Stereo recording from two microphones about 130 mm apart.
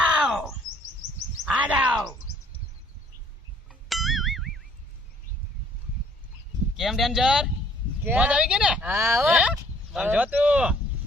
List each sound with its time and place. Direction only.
0.0 s chirp: 10° right (ahead or behind)
1.5 s groan: 10° right (ahead or behind)
3.7 s a sound: centre (ahead or behind)
6.7 s speech: centre (ahead or behind)
8.9 s speech: 20° right (ahead or behind)
9.2 s speech: 5° right (ahead or behind)